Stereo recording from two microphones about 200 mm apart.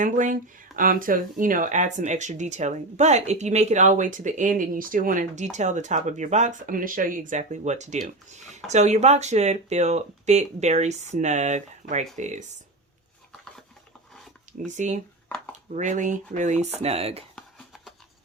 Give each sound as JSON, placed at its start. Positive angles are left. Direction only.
{"t": 0.0, "sound": "speech", "side_deg": -40}
{"t": 14.6, "sound": "speech", "side_deg": -35}